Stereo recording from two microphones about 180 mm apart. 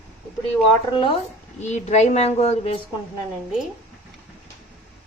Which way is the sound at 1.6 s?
40° left (ahead or behind).